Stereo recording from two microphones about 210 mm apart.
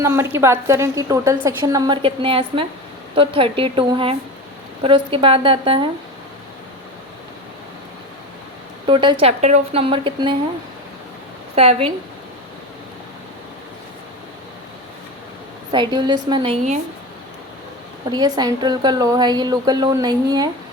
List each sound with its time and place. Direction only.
0.0 s a woman's voice: 10° right (ahead or behind)
8.9 s a woman's voice: 25° right (ahead or behind)
11.5 s a woman's voice: 30° right (ahead or behind)
15.7 s a woman's voice: 20° right (ahead or behind)
18.1 s a woman's voice: 20° right (ahead or behind)